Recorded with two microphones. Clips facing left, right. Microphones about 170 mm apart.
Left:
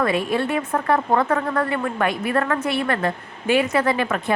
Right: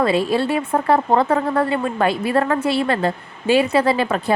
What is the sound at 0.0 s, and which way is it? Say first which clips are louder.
Speech: right 3 dB; 30° right (ahead or behind).